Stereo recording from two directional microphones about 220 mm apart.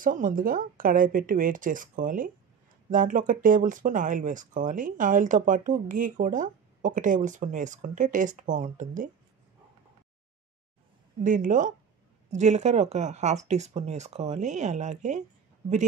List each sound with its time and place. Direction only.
0.0 s speech: 35° right (ahead or behind)
11.2 s speech: 35° right (ahead or behind)